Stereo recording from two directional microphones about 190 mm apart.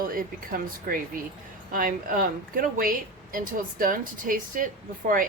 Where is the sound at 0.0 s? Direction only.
50° right (ahead or behind).